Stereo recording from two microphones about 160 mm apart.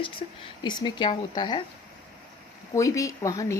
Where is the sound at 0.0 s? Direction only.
30° left (ahead or behind).